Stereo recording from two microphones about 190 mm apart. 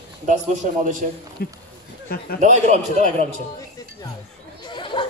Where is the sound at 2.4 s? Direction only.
40° right (ahead or behind).